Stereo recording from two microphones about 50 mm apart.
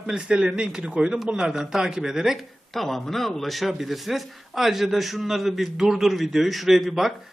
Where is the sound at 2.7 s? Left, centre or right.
Centre.